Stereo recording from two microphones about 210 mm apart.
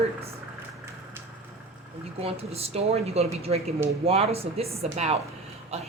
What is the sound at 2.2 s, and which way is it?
Speech, 30° right (ahead or behind).